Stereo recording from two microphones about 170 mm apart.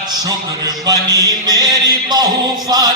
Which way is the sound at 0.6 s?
20° right (ahead or behind).